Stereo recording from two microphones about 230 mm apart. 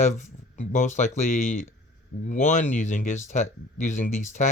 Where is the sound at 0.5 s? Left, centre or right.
Left.